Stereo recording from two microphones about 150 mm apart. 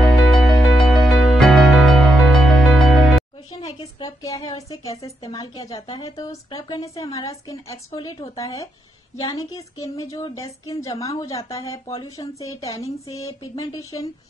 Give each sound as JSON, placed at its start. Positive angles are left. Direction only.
{"t": 0.0, "sound": "music", "side_deg": 0}
{"t": 4.0, "sound": "a woman's voice", "side_deg": 20}